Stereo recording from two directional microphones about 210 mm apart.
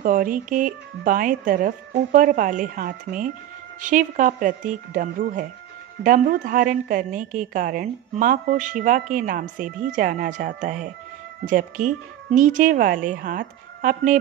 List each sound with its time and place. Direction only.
0.0 s a woman's voice: 40° right (ahead or behind)